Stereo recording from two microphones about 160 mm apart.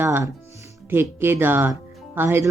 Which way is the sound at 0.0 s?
15° right (ahead or behind).